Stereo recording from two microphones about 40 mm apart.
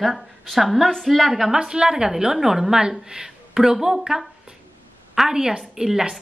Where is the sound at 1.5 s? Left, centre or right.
Centre.